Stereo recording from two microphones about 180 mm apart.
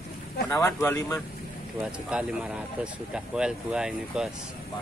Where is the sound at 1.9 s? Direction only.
5° right (ahead or behind).